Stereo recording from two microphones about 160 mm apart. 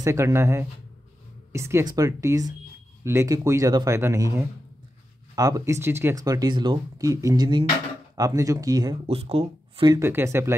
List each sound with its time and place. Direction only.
0.0 s speech: 15° right (ahead or behind)
9.0 s speech: 40° right (ahead or behind)
9.9 s speech: 15° right (ahead or behind)